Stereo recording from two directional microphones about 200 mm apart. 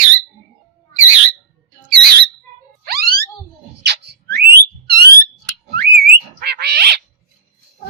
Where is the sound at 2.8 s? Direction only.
50° right (ahead or behind).